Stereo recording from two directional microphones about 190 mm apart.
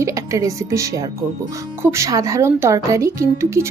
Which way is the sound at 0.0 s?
15° right (ahead or behind).